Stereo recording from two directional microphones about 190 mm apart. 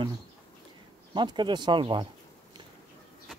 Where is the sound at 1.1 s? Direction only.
25° right (ahead or behind).